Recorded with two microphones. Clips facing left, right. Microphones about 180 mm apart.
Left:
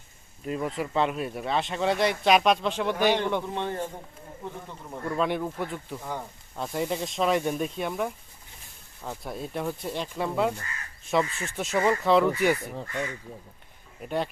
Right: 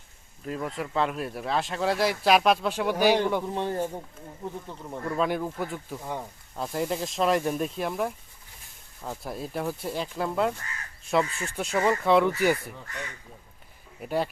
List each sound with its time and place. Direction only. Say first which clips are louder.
0.4 s speech: left 2 dB; centre (ahead or behind)
4.9 s speech: even; centre (ahead or behind)
12.7 s speech: left 7 dB; 40° left (ahead or behind)
14.0 s speech: right 1 dB; 5° right (ahead or behind)